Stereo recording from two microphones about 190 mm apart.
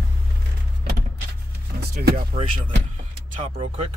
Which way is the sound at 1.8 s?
55° right (ahead or behind).